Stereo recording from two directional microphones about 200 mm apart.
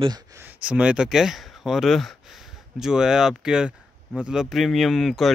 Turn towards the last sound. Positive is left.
turn(degrees=0)  # may be behind; listen again after turning